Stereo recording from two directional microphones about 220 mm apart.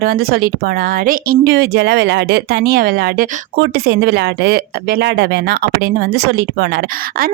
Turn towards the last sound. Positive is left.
turn(degrees=-45)  # may be behind; listen again after turning